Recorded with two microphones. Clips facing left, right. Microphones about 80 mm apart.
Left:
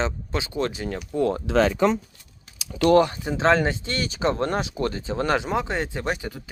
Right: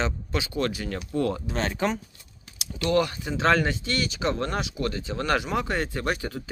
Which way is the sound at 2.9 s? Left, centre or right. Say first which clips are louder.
Left 3 dB; left.